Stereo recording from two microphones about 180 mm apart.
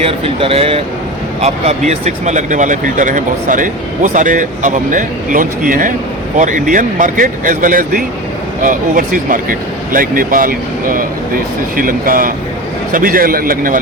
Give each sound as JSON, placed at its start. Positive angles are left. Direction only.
{"t": 0.0, "sound": "speech", "side_deg": -30}